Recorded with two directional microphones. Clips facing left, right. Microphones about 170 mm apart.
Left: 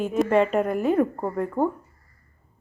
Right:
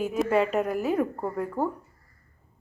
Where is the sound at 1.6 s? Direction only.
25° left (ahead or behind).